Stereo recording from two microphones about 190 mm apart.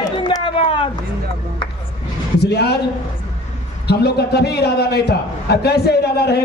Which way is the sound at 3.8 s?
60° left (ahead or behind).